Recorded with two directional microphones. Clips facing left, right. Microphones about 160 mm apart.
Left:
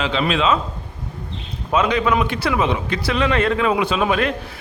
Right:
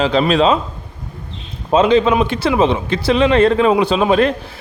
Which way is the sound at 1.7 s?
30° right (ahead or behind).